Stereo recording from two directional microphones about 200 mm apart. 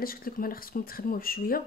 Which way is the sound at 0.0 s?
45° left (ahead or behind).